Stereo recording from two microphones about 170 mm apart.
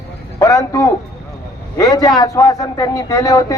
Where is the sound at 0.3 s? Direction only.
20° left (ahead or behind).